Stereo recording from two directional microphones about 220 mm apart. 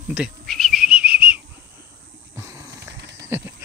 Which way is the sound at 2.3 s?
15° right (ahead or behind).